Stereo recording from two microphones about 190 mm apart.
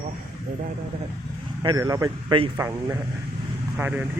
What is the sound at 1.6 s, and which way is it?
A man's voice, 20° right (ahead or behind).